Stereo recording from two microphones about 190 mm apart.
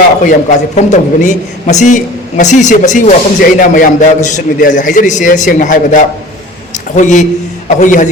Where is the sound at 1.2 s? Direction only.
40° left (ahead or behind).